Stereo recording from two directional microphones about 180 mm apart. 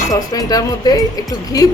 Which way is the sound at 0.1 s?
20° left (ahead or behind).